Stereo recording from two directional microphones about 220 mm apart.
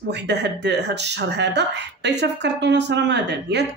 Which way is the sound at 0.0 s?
50° right (ahead or behind).